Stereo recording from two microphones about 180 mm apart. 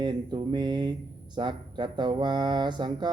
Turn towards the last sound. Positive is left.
turn(degrees=-25)  # may be behind; listen again after turning